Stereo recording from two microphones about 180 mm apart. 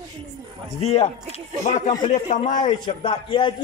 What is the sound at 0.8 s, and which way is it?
A man's voice, 35° left (ahead or behind).